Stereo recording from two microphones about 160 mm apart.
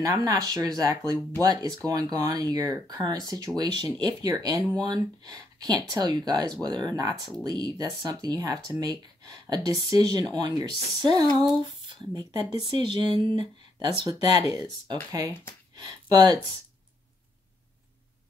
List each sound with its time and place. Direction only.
0.0 s speech: 20° right (ahead or behind)